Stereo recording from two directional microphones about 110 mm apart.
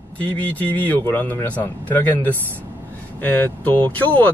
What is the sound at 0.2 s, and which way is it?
Speech, 15° left (ahead or behind).